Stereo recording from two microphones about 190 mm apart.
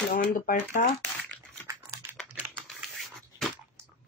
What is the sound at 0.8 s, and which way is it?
Speech, 45° left (ahead or behind).